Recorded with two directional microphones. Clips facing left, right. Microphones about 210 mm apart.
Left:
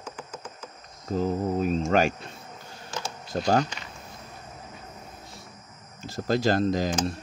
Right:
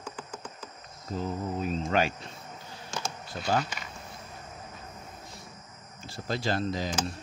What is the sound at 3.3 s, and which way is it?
Speech, 45° left (ahead or behind).